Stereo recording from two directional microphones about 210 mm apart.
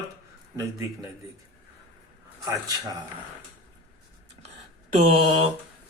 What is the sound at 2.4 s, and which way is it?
Speech, 15° right (ahead or behind).